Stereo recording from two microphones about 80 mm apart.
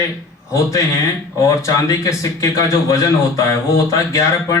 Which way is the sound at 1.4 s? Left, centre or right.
Left.